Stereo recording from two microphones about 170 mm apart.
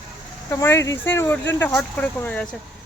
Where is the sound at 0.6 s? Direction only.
15° left (ahead or behind).